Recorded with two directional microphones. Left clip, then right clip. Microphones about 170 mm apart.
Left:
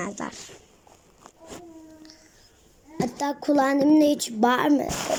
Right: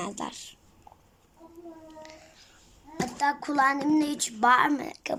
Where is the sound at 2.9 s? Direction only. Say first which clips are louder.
Even; 15° left (ahead or behind).